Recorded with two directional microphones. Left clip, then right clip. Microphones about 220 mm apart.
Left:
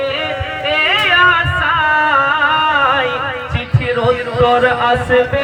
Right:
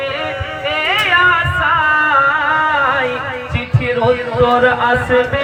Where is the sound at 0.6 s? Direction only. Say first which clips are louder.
Left 2 dB; 50° left (ahead or behind).